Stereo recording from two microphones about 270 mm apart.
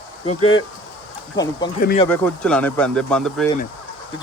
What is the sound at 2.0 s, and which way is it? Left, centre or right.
Speech, centre.